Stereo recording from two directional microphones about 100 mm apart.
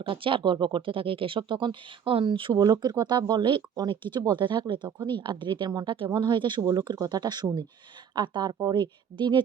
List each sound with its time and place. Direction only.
0.0 s speech: 60° right (ahead or behind)
3.0 s speech: 45° right (ahead or behind)